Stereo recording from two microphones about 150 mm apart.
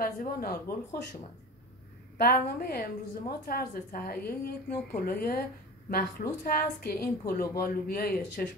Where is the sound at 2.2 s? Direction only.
90° left.